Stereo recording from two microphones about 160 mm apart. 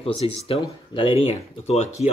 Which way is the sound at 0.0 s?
35° left (ahead or behind).